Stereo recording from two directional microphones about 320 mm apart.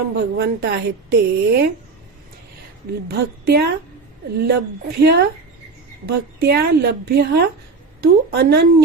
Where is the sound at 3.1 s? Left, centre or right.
Right.